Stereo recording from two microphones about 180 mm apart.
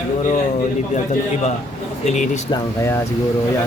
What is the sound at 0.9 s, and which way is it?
A man's voice, 40° left (ahead or behind).